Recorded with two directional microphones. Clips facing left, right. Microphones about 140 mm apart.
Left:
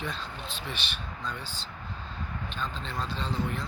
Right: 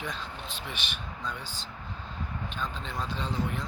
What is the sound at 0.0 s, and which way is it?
Speech, 10° right (ahead or behind).